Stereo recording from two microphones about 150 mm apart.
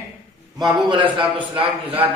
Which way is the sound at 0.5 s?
30° right (ahead or behind).